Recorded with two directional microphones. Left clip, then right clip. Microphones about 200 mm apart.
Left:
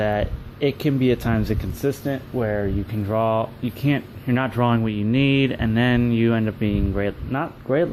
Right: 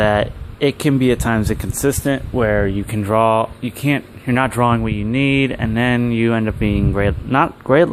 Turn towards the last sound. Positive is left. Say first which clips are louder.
# right 8 dB
turn(degrees=-35)  # may be behind; listen again after turning